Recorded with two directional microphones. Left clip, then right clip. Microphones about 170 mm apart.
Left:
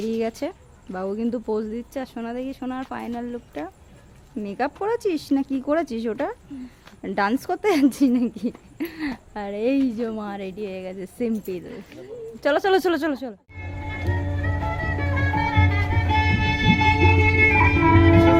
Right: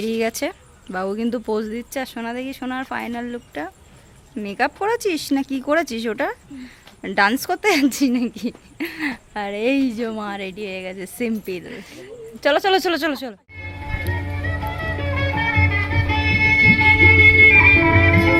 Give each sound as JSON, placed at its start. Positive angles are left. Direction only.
{"t": 0.1, "sound": "speech", "side_deg": 0}
{"t": 12.5, "sound": "speech", "side_deg": 10}
{"t": 15.0, "sound": "music", "side_deg": 10}
{"t": 16.0, "sound": "music", "side_deg": 30}